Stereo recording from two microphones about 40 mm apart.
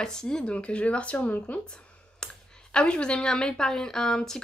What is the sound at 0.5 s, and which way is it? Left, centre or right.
Speech, left.